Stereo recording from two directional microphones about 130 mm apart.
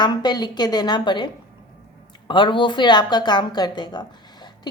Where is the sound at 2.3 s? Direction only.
40° left (ahead or behind).